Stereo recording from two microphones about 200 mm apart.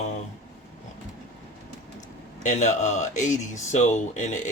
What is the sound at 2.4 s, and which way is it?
Speech, 35° left (ahead or behind).